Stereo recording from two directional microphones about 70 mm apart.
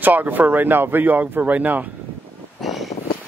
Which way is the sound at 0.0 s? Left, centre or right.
Right.